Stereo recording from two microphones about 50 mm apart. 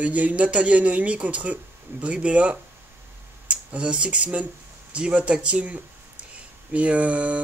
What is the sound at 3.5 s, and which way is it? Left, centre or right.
Speech, right.